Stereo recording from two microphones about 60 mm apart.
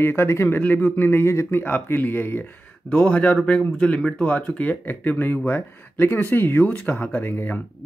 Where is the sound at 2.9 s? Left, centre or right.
Left.